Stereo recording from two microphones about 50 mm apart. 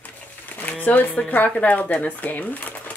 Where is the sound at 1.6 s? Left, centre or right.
Left.